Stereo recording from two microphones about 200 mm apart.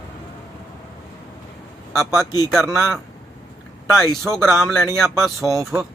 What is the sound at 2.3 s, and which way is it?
Vehicle, 20° left (ahead or behind).